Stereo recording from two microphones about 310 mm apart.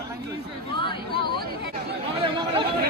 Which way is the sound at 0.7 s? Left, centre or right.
Centre.